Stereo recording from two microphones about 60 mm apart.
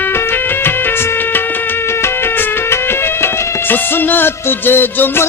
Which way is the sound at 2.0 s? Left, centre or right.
Left.